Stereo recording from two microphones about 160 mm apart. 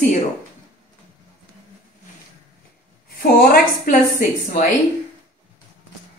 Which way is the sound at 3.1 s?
65° left (ahead or behind).